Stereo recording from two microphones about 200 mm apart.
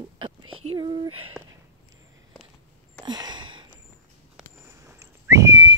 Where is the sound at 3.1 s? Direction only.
20° right (ahead or behind).